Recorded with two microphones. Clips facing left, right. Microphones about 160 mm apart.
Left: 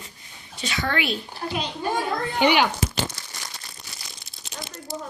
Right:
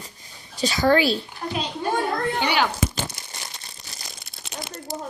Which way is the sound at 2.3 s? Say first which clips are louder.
Left 8 dB; 15° left (ahead or behind).